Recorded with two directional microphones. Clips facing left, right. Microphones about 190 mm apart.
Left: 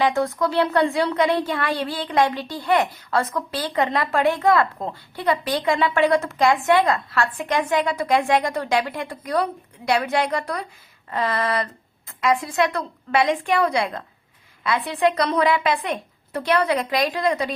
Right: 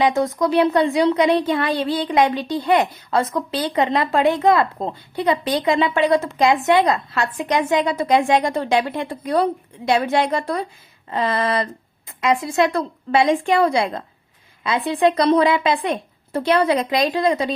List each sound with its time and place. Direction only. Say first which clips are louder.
0.0 s speech: right 2 dB; 20° right (ahead or behind)